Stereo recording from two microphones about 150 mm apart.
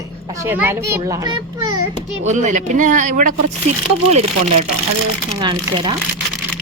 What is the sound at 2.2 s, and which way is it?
Speech, 55° right (ahead or behind).